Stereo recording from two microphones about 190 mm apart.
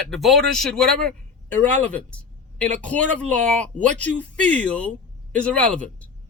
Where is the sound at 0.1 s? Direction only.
Centre (ahead or behind).